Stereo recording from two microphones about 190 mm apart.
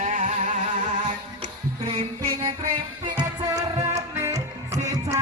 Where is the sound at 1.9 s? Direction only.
30° right (ahead or behind).